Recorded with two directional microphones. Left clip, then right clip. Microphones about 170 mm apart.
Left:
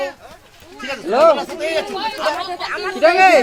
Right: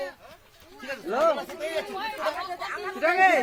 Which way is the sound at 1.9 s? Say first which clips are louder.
Left 9 dB; 60° left (ahead or behind).